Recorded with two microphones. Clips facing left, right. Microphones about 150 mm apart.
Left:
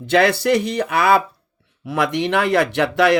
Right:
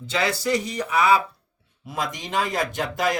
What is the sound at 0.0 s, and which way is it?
Speech, 65° left (ahead or behind).